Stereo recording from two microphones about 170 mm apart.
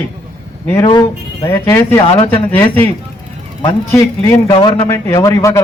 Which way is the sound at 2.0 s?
30° left (ahead or behind).